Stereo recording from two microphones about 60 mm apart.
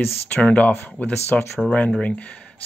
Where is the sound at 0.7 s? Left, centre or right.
Left.